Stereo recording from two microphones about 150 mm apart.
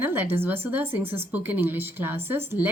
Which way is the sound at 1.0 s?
40° right (ahead or behind).